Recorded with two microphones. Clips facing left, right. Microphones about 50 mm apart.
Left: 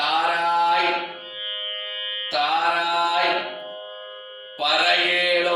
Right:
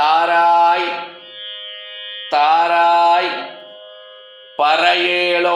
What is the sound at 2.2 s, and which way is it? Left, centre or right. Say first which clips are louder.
Mantra: right 8 dB; right.